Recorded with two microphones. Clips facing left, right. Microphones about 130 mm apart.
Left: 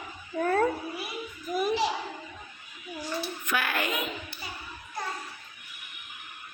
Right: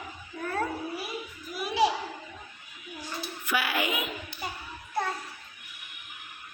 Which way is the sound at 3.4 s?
10° right (ahead or behind).